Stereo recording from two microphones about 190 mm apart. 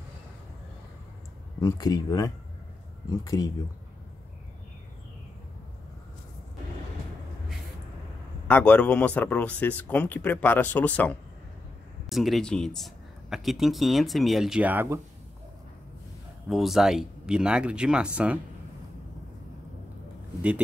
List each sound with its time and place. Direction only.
1.6 s speech: 20° left (ahead or behind)
8.5 s speech: 5° left (ahead or behind); by 15.0 s 10° right (ahead or behind)
16.4 s speech: centre (ahead or behind)